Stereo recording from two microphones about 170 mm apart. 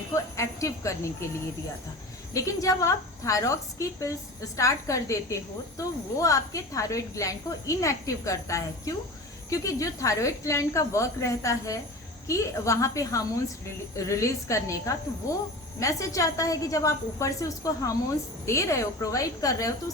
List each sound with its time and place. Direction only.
0.3 s speech: 20° left (ahead or behind)
2.3 s a woman's voice: 20° left (ahead or behind)